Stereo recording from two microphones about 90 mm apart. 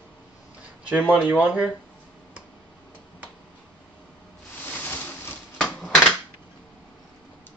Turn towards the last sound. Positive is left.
turn(degrees=10)  # may be behind; listen again after turning